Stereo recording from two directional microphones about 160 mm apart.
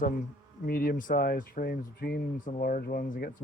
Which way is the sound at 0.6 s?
65° left (ahead or behind).